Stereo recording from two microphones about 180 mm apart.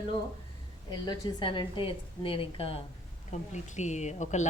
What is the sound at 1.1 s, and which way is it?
A woman's voice, 25° left (ahead or behind).